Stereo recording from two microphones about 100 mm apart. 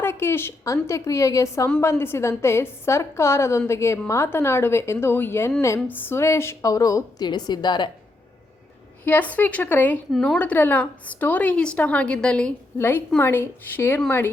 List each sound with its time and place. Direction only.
0.0 s a woman's voice: 25° left (ahead or behind)
7.3 s a woman's voice: 45° left (ahead or behind)
9.0 s a woman's voice: 15° left (ahead or behind)
13.1 s a woman's voice: 20° left (ahead or behind)